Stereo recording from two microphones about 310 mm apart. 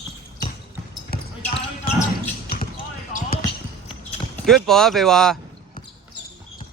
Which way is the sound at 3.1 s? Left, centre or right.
Left.